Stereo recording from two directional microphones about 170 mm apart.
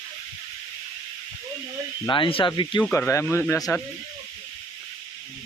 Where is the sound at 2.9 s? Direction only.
15° left (ahead or behind).